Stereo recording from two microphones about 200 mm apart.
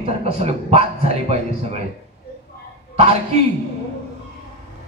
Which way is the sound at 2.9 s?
30° right (ahead or behind).